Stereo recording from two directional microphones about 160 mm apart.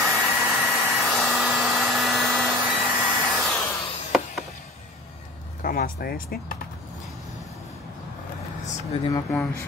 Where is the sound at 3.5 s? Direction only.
15° left (ahead or behind).